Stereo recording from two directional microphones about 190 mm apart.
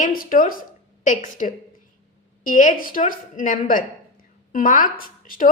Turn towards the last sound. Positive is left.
turn(degrees=45)  # may be behind; listen again after turning